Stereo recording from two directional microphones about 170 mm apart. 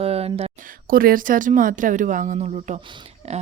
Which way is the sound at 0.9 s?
55° right (ahead or behind).